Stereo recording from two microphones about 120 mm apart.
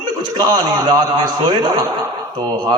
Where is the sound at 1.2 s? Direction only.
35° right (ahead or behind).